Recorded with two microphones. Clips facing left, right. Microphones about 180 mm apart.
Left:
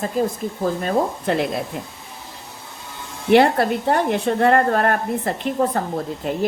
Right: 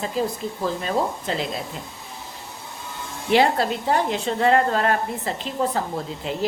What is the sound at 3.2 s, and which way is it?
A woman's voice, 55° left (ahead or behind).